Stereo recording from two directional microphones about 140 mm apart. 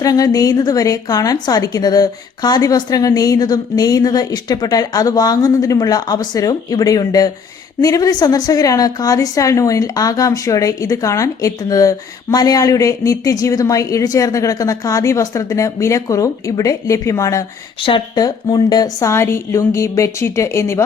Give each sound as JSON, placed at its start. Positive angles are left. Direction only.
{"t": 0.0, "sound": "a woman's voice", "side_deg": 25}